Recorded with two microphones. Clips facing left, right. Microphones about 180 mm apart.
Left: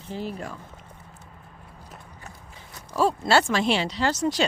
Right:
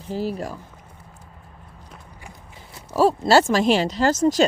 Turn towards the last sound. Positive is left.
turn(degrees=-45)  # may be behind; listen again after turning